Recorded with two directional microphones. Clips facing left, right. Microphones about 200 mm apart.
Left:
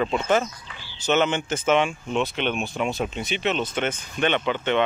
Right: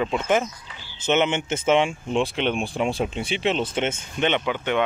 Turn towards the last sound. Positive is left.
turn(degrees=-10)  # may be behind; listen again after turning